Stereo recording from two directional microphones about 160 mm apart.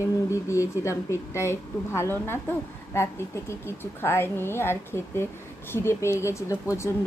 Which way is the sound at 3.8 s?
15° left (ahead or behind).